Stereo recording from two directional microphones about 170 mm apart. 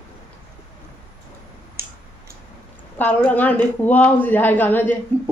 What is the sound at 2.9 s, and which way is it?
A woman's voice, 10° left (ahead or behind).